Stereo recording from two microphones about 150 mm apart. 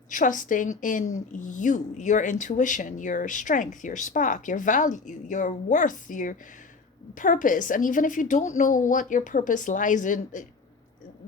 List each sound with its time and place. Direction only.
0.1 s a woman's voice: 60° left (ahead or behind)